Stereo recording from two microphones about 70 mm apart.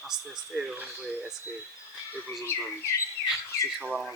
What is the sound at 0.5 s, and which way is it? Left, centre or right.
Speech, centre.